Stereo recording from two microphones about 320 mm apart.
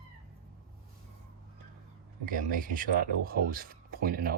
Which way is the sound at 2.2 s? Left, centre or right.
Right.